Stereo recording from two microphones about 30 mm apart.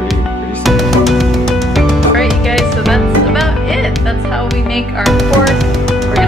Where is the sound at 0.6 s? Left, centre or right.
Centre.